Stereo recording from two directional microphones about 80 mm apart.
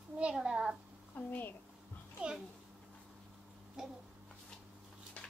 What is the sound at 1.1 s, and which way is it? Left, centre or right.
Speech, left.